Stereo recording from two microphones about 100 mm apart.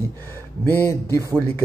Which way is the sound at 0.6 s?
25° left (ahead or behind).